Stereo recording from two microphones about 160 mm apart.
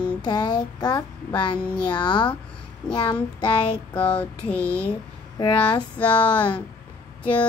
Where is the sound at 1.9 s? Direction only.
25° left (ahead or behind).